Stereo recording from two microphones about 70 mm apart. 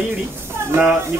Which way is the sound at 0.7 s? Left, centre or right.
Right.